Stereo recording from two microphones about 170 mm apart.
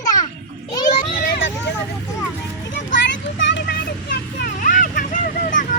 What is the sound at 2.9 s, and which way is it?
Vehicle, 90° left.